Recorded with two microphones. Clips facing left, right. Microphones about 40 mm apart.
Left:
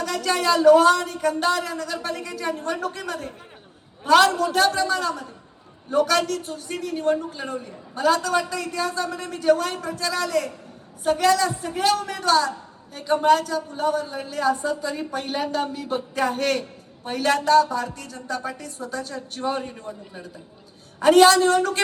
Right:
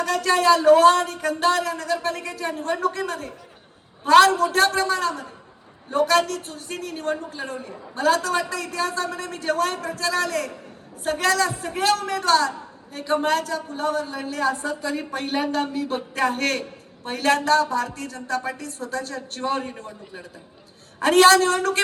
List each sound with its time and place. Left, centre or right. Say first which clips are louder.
0.0 s a woman's voice: right 4 dB; right
21.0 s a woman's voice: even; right